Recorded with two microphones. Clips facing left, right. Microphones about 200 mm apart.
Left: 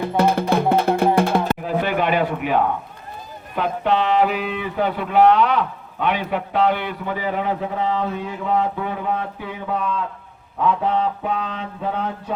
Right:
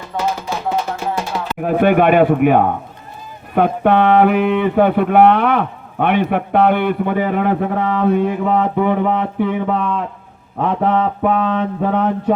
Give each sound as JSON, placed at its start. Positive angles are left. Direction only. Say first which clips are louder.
{"t": 0.0, "sound": "music", "louder": "left 4 dB", "side_deg": 60}
{"t": 1.6, "sound": "speech", "louder": "right 8 dB", "side_deg": -55}
{"t": 10.7, "sound": "mantra", "louder": "right 4 dB", "side_deg": -50}